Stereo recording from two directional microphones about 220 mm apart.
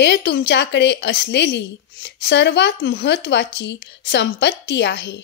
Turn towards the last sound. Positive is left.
turn(degrees=50)  # may be behind; listen again after turning